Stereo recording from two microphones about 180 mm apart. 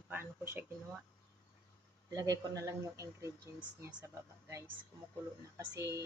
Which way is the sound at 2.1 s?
20° right (ahead or behind).